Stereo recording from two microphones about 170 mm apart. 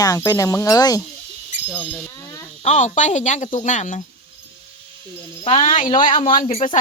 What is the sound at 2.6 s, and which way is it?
Speech, 45° left (ahead or behind).